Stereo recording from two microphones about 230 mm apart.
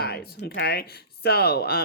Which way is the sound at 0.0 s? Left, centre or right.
Left.